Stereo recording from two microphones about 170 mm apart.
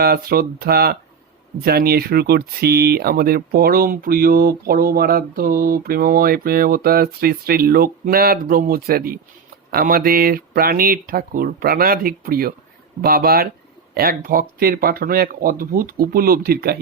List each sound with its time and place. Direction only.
0.0 s speech: 65° right (ahead or behind)